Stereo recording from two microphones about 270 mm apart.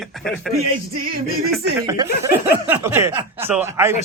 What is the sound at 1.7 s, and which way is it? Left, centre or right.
Speech, centre.